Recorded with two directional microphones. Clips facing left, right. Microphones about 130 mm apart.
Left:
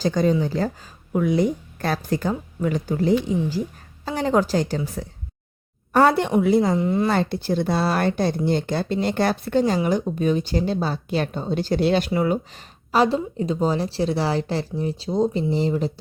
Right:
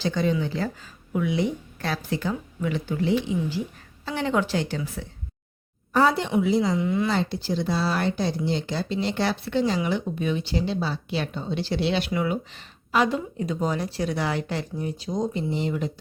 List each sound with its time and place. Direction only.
0.0 s speech: 40° left (ahead or behind)
5.9 s a woman's voice: 60° left (ahead or behind); by 7.1 s 40° left (ahead or behind)
7.1 s speech: 55° left (ahead or behind); by 15.9 s 35° left (ahead or behind)